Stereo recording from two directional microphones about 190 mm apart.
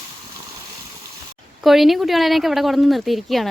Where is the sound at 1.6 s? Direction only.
Centre (ahead or behind).